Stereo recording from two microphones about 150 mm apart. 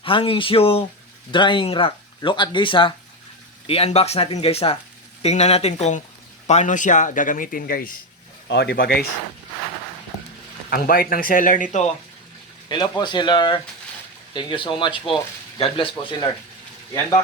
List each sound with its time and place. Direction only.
0.0 s speech: 35° left (ahead or behind); by 7.9 s 70° left (ahead or behind)
8.5 s speech: 90° left
10.7 s speech: 80° left; by 11.9 s 55° left (ahead or behind)
12.6 s speech: 30° left (ahead or behind)